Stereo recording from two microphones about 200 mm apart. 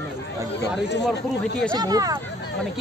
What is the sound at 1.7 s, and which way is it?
Speech, 20° right (ahead or behind).